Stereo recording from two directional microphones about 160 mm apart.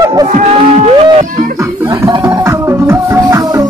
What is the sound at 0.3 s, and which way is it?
Music, 45° right (ahead or behind).